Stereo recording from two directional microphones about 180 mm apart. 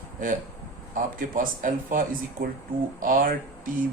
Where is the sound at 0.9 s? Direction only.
45° right (ahead or behind).